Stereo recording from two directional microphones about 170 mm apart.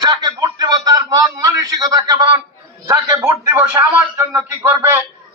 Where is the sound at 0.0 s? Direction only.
25° right (ahead or behind).